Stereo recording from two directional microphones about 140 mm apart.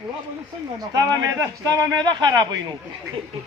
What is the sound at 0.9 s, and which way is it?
Speech, 25° right (ahead or behind).